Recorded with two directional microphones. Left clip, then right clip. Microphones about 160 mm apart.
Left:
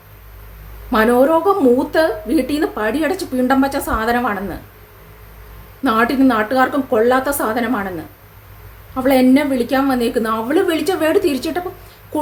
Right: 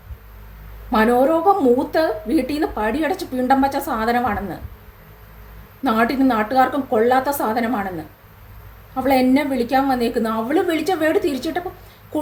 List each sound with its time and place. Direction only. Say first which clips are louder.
0.9 s a woman's voice: left 3 dB; 20° left (ahead or behind)
5.8 s a woman's voice: left 3 dB; 20° left (ahead or behind)